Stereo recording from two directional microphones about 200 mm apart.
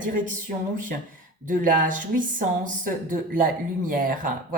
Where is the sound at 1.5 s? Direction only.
40° right (ahead or behind).